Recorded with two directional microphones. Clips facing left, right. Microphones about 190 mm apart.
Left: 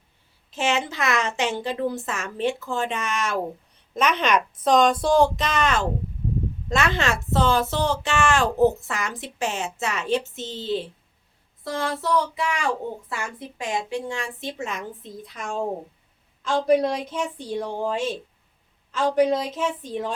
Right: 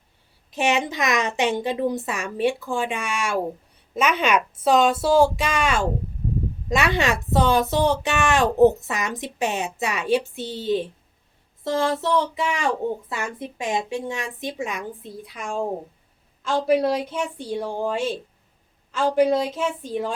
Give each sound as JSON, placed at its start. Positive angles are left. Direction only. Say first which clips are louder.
{"t": 0.5, "sound": "a woman's voice", "louder": "right 2 dB", "side_deg": -15}
{"t": 11.6, "sound": "a woman's voice", "louder": "right 5 dB", "side_deg": -25}